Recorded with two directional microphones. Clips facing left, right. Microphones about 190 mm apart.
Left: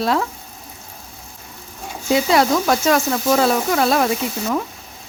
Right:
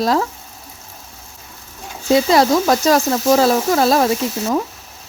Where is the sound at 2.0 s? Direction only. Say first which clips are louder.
Right 3 dB; 35° right (ahead or behind).